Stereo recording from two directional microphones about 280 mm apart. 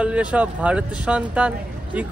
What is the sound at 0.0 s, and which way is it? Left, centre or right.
Speech, centre.